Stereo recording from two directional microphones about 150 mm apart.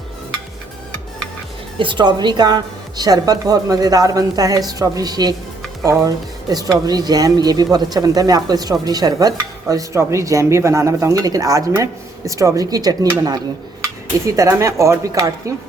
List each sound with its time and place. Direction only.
1.8 s speech: 30° right (ahead or behind)